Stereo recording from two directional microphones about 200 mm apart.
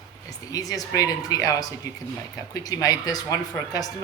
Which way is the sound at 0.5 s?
20° left (ahead or behind).